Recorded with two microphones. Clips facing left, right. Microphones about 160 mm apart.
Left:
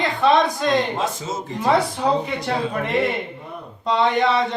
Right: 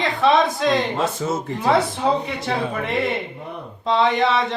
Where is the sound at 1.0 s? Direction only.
60° right (ahead or behind).